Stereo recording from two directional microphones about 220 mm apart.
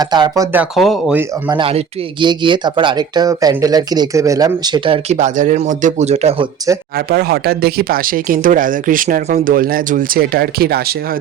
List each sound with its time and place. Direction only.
0.0 s speech: 20° right (ahead or behind)
0.5 s speech: 5° right (ahead or behind)
1.5 s speech: 25° right (ahead or behind)
6.9 s speech: 45° right (ahead or behind)